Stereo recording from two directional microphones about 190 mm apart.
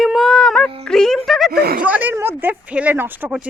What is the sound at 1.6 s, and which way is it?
Speech, 55° right (ahead or behind).